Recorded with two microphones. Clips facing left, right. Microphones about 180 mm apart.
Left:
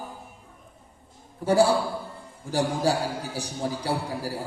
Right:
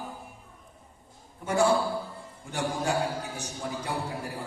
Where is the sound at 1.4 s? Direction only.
35° left (ahead or behind).